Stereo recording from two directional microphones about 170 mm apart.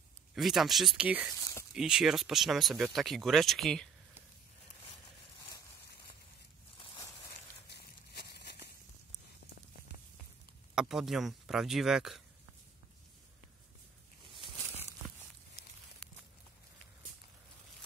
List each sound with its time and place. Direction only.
0.3 s speech: centre (ahead or behind)
7.7 s a sound: 75° left (ahead or behind)
10.7 s speech: 5° right (ahead or behind)